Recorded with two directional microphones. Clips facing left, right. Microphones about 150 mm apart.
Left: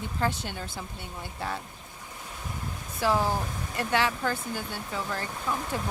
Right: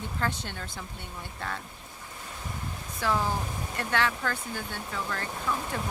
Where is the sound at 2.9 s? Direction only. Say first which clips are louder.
Left 3 dB; 10° left (ahead or behind).